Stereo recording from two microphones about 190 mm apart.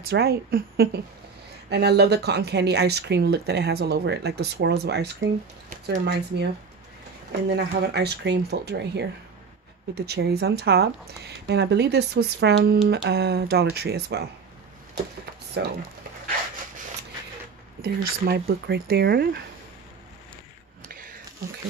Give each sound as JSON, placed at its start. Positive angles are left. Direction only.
{"t": 0.1, "sound": "speech", "side_deg": -55}
{"t": 15.6, "sound": "speech", "side_deg": -65}
{"t": 17.8, "sound": "speech", "side_deg": -55}
{"t": 20.9, "sound": "a sound", "side_deg": -50}